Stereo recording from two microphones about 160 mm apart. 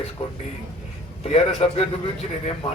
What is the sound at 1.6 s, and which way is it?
Speech, 40° left (ahead or behind).